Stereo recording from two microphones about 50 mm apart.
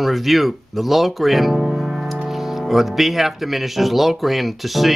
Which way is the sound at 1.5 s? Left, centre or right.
Centre.